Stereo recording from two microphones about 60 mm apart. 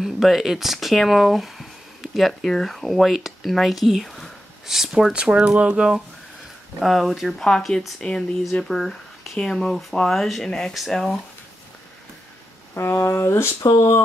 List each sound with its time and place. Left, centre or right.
0.0 s speech: centre
6.8 s speech: centre
7.4 s speech: centre
8.0 s speech: left
8.6 s speech: centre
12.7 s speech: left